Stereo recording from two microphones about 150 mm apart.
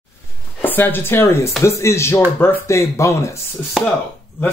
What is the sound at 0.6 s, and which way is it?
Speech, 15° left (ahead or behind).